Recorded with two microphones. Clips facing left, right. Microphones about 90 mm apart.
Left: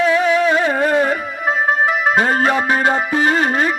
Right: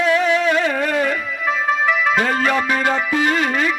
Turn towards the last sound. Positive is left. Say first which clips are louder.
# left 2 dB
turn(degrees=35)  # may be behind; listen again after turning